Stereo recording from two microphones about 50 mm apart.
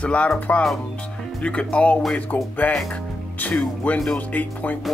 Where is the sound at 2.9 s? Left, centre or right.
Left.